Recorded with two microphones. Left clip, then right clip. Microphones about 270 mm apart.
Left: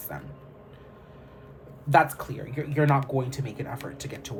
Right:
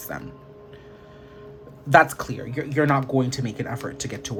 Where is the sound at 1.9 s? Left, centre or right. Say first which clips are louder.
Right 5 dB; right.